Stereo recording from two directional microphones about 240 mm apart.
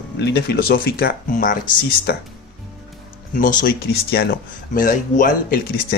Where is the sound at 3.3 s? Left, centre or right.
Left.